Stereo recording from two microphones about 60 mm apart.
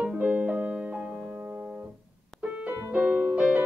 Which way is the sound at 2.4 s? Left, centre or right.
Right.